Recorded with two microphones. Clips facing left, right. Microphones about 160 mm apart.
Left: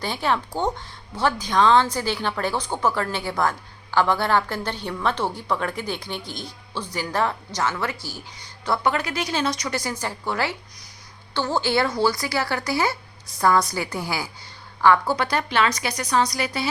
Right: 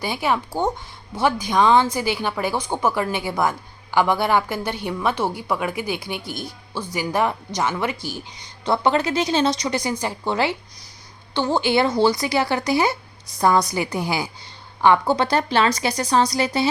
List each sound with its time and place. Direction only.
0.0 s a woman's voice: 10° right (ahead or behind)